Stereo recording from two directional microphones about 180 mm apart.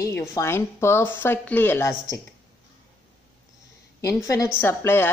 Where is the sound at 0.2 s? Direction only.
15° left (ahead or behind).